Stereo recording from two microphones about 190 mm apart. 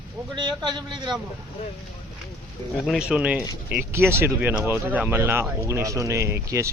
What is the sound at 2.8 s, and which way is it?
Speech, centre (ahead or behind).